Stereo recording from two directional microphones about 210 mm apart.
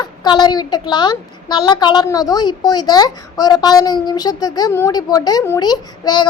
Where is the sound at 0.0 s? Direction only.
20° left (ahead or behind).